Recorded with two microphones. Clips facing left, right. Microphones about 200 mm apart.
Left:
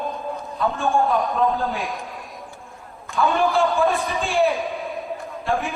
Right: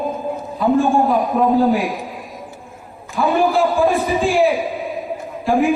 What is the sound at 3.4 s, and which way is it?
A man's voice, centre (ahead or behind).